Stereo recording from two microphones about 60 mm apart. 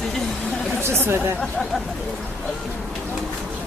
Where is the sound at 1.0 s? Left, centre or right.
Right.